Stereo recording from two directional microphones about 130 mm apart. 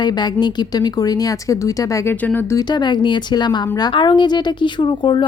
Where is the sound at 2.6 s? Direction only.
35° left (ahead or behind).